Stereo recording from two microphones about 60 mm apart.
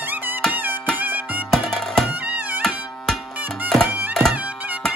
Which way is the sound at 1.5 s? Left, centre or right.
Centre.